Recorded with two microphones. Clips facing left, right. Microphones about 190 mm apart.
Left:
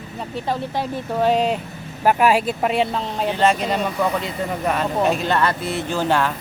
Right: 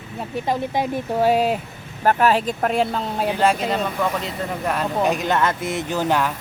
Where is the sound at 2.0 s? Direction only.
10° left (ahead or behind).